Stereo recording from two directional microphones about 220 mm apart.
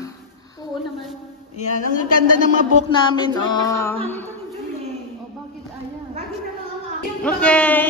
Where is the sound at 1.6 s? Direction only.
35° left (ahead or behind).